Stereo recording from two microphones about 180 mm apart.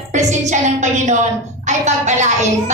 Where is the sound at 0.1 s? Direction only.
40° right (ahead or behind).